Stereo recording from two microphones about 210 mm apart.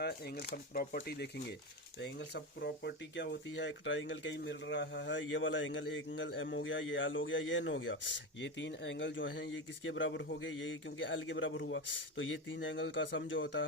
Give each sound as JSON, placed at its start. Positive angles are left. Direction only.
{"t": 0.0, "sound": "speech", "side_deg": 50}